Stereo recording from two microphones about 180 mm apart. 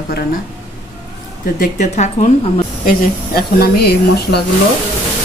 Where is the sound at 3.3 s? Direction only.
60° left (ahead or behind).